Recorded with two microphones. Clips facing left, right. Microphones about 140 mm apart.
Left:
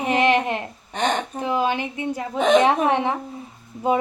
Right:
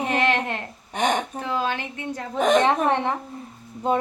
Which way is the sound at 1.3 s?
15° left (ahead or behind).